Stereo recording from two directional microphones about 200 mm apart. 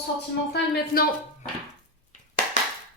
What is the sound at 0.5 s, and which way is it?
Speech, 50° left (ahead or behind).